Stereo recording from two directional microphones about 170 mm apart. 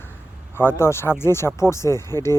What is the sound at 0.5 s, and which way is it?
Speech, 15° left (ahead or behind).